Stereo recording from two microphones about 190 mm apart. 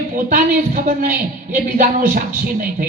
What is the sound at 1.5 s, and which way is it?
Speech, 45° right (ahead or behind).